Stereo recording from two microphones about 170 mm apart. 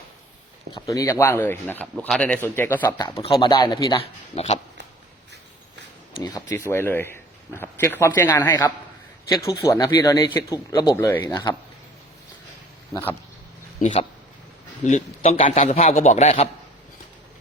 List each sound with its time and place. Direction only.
0.7 s speech: 20° left (ahead or behind)
2.8 s speech: 25° left (ahead or behind)
3.9 s a man's voice: 35° left (ahead or behind)
6.1 s speech: 20° left (ahead or behind)
12.9 s speech: 10° left (ahead or behind)
14.8 s a man's voice: 40° left (ahead or behind)